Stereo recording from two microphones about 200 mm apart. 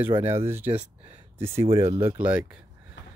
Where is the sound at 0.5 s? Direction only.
10° right (ahead or behind).